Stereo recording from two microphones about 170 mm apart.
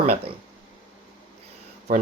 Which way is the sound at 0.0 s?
35° right (ahead or behind).